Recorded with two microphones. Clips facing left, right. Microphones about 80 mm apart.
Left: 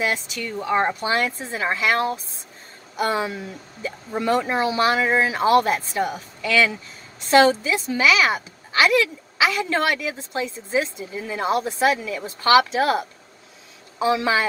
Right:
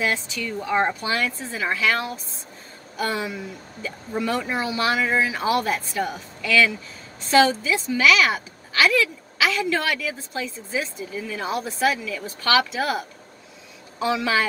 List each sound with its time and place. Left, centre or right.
0.0 s a woman's voice: centre
5.4 s a woman's voice: left
7.7 s a woman's voice: centre